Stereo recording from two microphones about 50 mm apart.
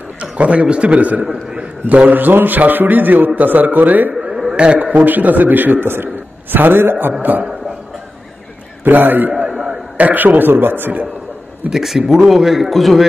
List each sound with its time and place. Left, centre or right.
0.2 s a man's voice: right
1.2 s a man's voice: centre
2.0 s a man's voice: right
4.2 s a man's voice: centre; by 7.4 s right
8.8 s a man's voice: right
11.7 s a man's voice: centre